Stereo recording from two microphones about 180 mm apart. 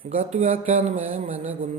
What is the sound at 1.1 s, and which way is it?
Speech, 30° right (ahead or behind).